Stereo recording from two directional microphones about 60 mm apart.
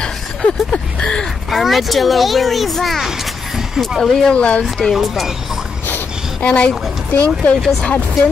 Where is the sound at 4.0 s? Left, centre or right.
Centre.